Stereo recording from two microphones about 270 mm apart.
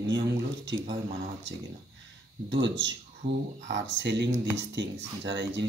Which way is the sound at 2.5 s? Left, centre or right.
Right.